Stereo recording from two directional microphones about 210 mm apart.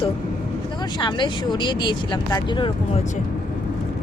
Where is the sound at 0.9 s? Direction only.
20° left (ahead or behind).